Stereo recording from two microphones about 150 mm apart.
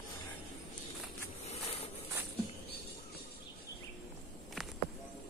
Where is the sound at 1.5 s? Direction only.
40° left (ahead or behind).